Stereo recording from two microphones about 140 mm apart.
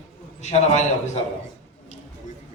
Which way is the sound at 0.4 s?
55° left (ahead or behind).